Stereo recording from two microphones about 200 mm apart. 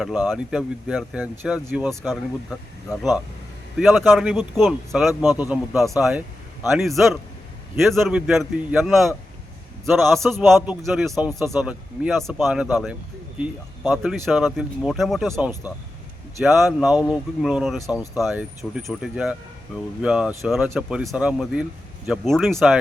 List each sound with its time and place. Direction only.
0.0 s speech: centre (ahead or behind)
2.0 s speech: centre (ahead or behind)
11.3 s speech: 10° right (ahead or behind)
17.8 s speech: 15° left (ahead or behind)
18.2 s speech: centre (ahead or behind)